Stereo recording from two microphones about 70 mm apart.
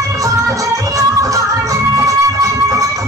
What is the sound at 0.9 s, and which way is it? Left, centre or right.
Music, right.